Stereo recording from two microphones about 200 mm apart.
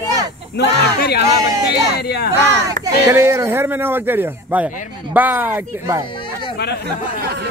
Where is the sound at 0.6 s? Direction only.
55° left (ahead or behind).